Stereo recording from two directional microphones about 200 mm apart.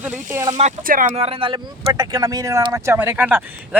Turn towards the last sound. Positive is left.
turn(degrees=-10)  # may be behind; listen again after turning